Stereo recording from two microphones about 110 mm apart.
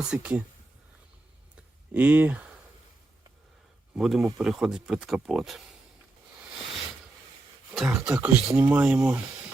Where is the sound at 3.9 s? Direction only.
5° right (ahead or behind).